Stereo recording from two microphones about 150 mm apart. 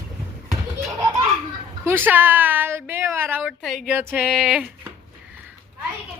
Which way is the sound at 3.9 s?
10° right (ahead or behind).